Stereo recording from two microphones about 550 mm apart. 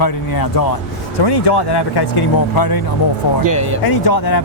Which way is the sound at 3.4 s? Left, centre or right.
Right.